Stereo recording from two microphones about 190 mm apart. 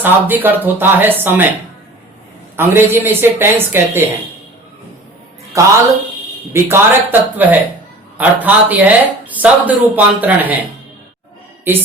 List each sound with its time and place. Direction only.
0.0 s speech: 10° right (ahead or behind)
2.6 s speech: 10° right (ahead or behind)
5.5 s speech: 15° right (ahead or behind)